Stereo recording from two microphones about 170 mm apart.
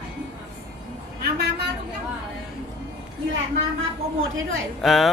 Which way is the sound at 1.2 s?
70° right (ahead or behind).